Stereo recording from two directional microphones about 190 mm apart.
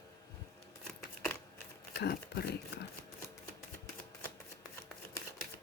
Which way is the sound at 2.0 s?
60° left (ahead or behind).